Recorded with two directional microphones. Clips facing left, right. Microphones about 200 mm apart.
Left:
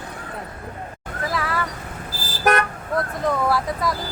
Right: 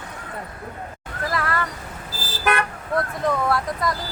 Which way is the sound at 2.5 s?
40° left (ahead or behind).